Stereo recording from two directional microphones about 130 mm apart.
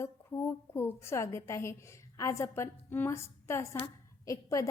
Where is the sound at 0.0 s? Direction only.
20° left (ahead or behind).